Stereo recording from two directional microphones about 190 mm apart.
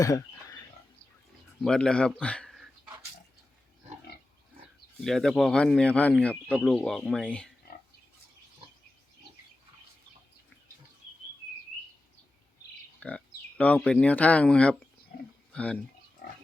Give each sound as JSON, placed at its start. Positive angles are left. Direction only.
{"t": 0.0, "sound": "bird", "side_deg": 20}
{"t": 1.6, "sound": "speech", "side_deg": 5}
{"t": 2.2, "sound": "a sound", "side_deg": 5}
{"t": 4.9, "sound": "speech", "side_deg": 0}
{"t": 13.0, "sound": "speech", "side_deg": 5}